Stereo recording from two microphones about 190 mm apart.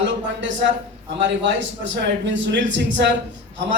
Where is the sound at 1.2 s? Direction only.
75° right (ahead or behind).